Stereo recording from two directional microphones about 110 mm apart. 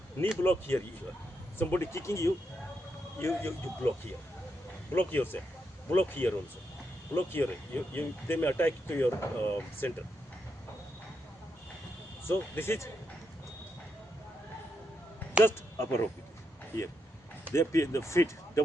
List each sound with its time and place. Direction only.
0.4 s speech: 20° left (ahead or behind)
4.9 s speech: 20° left (ahead or behind)
12.2 s speech: 20° left (ahead or behind)
15.4 s speech: 20° left (ahead or behind)
17.5 s speech: 25° left (ahead or behind)